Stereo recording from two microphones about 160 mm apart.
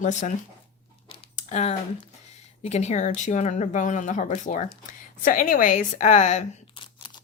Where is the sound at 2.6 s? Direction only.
45° left (ahead or behind).